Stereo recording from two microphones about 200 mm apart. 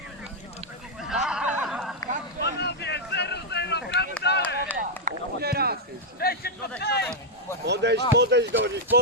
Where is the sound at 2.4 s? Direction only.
55° left (ahead or behind).